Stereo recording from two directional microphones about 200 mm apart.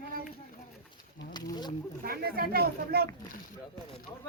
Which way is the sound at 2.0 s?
50° right (ahead or behind).